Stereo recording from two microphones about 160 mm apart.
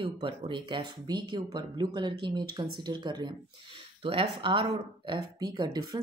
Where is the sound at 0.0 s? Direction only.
30° right (ahead or behind).